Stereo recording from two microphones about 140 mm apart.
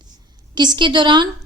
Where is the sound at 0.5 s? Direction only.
30° right (ahead or behind).